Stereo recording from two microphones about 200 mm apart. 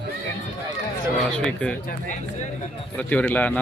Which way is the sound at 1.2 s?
5° left (ahead or behind).